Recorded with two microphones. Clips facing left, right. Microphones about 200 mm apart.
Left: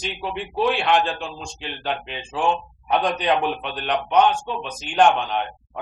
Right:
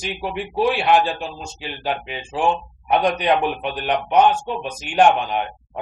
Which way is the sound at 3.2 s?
50° right (ahead or behind).